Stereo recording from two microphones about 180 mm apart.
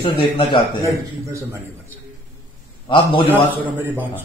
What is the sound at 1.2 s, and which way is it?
Speech, 15° right (ahead or behind).